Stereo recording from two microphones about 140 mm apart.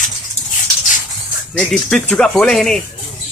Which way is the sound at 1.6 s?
5° left (ahead or behind).